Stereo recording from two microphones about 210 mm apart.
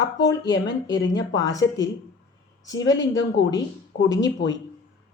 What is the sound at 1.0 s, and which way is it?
Speech, 60° left (ahead or behind).